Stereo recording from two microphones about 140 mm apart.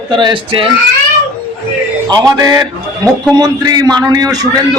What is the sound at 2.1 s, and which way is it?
A man's voice, 25° right (ahead or behind).